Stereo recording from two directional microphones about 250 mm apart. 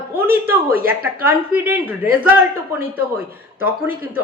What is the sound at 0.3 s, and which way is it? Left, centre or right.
Speech, right.